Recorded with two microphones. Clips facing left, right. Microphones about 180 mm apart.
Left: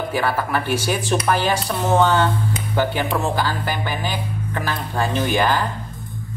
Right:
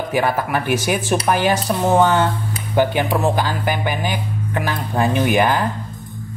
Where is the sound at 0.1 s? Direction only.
15° right (ahead or behind).